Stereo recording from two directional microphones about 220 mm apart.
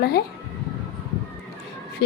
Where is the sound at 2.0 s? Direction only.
50° left (ahead or behind).